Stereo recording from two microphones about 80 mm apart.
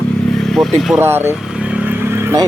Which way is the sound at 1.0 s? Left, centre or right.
Right.